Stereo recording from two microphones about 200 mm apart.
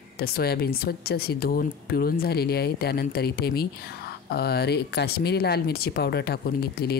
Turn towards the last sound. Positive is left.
turn(degrees=50)  # may be behind; listen again after turning